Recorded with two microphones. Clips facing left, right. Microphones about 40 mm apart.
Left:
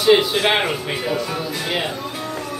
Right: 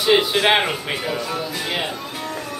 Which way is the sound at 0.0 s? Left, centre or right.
Centre.